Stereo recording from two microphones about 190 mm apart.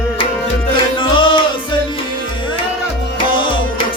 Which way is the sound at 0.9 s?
25° left (ahead or behind).